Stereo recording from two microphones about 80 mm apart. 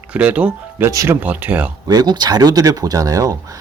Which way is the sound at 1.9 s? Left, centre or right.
Right.